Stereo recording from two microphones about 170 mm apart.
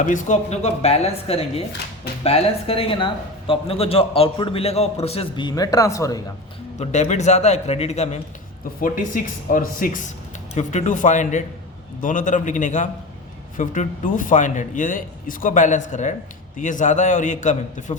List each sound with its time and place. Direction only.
0.0 s speech: 45° left (ahead or behind); by 6.2 s 20° left (ahead or behind)
6.7 s speech: 40° left (ahead or behind)
8.8 s speech: 50° left (ahead or behind)